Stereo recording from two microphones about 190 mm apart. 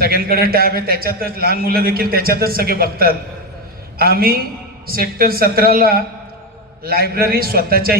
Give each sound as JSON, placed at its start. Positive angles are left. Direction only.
{"t": 0.0, "sound": "a man's voice", "side_deg": -55}